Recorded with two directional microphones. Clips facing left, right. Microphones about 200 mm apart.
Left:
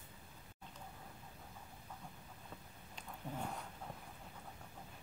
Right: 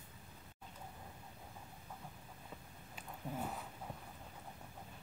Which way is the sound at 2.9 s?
5° right (ahead or behind).